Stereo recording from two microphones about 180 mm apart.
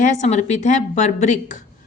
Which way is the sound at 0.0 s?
40° left (ahead or behind).